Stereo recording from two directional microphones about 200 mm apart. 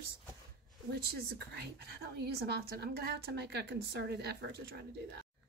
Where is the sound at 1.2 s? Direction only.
50° right (ahead or behind).